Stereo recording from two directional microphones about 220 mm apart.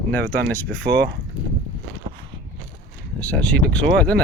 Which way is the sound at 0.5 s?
5° left (ahead or behind).